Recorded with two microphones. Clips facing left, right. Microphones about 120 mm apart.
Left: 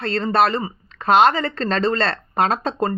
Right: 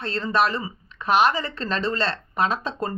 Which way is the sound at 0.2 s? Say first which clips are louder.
Left 4 dB; 60° left (ahead or behind).